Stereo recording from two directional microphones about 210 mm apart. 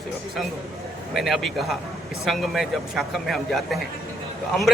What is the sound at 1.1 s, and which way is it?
A man's voice, centre (ahead or behind).